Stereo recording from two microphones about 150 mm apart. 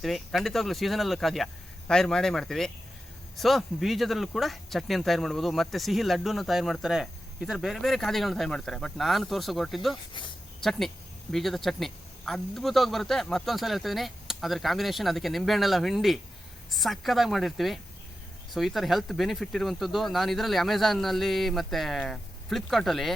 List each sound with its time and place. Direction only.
0.0 s speech: centre (ahead or behind)